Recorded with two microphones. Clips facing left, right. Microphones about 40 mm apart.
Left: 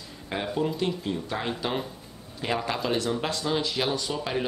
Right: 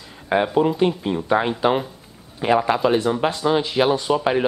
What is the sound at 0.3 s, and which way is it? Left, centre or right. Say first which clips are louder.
Speech: right 10 dB; right.